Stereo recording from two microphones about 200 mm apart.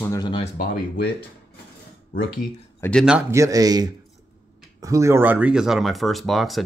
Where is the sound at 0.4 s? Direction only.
45° left (ahead or behind).